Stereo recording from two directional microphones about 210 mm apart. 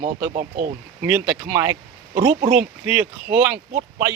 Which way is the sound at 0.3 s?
45° right (ahead or behind).